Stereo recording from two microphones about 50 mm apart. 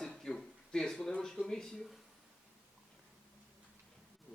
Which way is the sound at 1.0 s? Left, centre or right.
Centre.